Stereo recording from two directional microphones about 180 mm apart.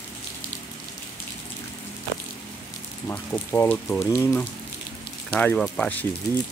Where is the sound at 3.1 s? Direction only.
15° left (ahead or behind).